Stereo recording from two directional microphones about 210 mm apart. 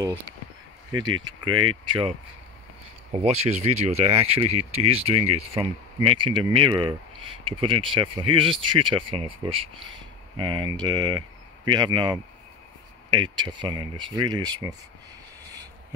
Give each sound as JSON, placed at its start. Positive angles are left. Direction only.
{"t": 1.5, "sound": "speech", "side_deg": -90}
{"t": 1.9, "sound": "speech", "side_deg": -25}